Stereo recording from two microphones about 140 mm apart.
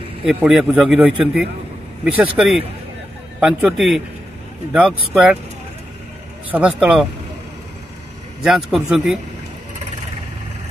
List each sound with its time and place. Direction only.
0.2 s a man's voice: 5° right (ahead or behind)
6.5 s speech: 10° right (ahead or behind)
8.4 s a man's voice: 5° right (ahead or behind)